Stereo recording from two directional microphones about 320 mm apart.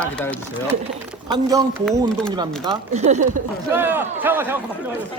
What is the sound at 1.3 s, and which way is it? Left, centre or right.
Speech, centre.